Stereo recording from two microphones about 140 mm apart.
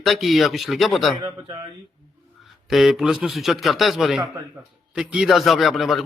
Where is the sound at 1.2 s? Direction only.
25° right (ahead or behind).